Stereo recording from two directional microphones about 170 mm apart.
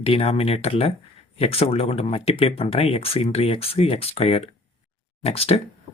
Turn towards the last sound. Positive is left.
turn(degrees=35)  # may be behind; listen again after turning